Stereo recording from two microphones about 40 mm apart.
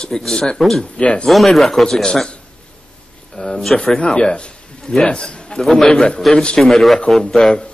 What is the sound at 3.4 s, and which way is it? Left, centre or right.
A man's voice, centre.